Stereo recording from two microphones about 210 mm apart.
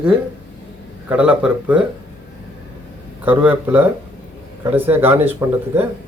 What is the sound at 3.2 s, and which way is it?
Speech, 10° right (ahead or behind).